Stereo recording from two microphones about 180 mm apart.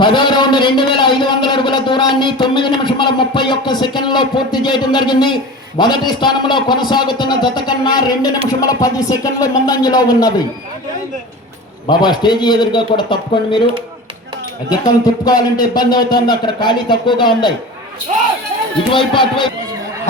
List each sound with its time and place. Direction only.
0.0 s a man's voice: 25° left (ahead or behind)
11.9 s speech: 25° left (ahead or behind)
14.7 s speech: 20° left (ahead or behind)
18.9 s speech: 25° left (ahead or behind)